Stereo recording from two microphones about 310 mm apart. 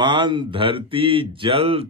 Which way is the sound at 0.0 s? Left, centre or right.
Centre.